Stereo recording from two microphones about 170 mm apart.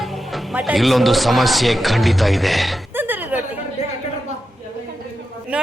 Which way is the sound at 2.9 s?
10° right (ahead or behind).